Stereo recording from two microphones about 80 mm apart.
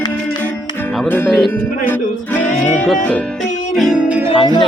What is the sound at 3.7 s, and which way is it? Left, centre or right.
Music, centre.